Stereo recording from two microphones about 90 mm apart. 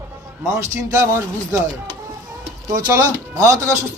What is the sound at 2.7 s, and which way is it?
A man's voice, 40° right (ahead or behind).